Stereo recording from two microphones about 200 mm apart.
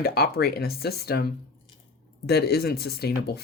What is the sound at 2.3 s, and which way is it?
Speech, 55° left (ahead or behind).